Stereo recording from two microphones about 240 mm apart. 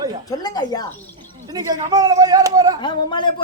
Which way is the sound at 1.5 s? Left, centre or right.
Centre.